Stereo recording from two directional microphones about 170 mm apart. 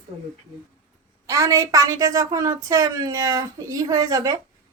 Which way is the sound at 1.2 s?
20° right (ahead or behind).